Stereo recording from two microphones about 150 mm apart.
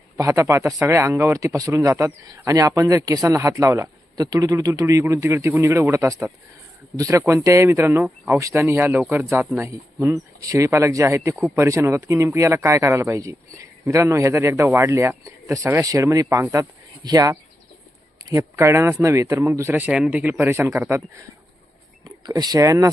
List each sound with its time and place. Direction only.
0.2 s speech: 20° right (ahead or behind)
22.0 s speech: 25° right (ahead or behind)